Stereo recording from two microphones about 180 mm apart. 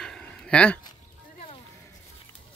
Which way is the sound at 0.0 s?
5° left (ahead or behind).